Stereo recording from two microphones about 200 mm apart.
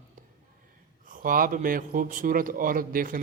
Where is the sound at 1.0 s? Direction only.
45° right (ahead or behind).